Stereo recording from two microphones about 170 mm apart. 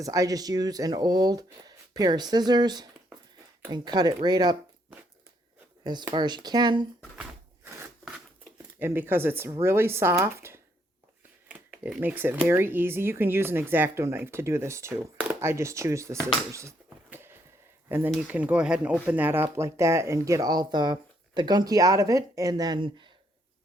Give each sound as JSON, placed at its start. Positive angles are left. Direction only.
{"t": 0.0, "sound": "speech", "side_deg": -20}
{"t": 5.8, "sound": "speech", "side_deg": -25}
{"t": 7.2, "sound": "a sound", "side_deg": -15}
{"t": 8.5, "sound": "speech", "side_deg": -15}